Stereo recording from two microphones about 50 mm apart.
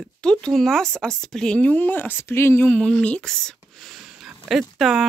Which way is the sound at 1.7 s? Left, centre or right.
Left.